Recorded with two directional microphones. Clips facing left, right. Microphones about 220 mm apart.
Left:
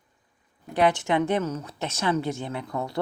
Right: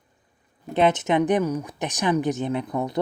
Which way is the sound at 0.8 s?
20° right (ahead or behind).